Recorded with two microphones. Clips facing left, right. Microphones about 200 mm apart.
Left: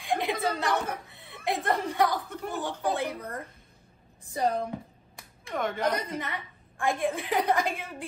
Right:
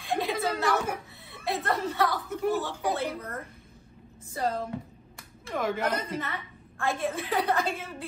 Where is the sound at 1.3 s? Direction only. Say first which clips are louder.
Left 1 dB; 15° left (ahead or behind).